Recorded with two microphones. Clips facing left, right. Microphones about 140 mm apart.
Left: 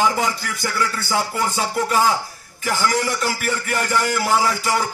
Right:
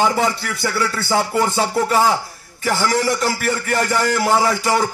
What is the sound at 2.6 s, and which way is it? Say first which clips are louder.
A man's voice: right 3 dB; 35° right (ahead or behind).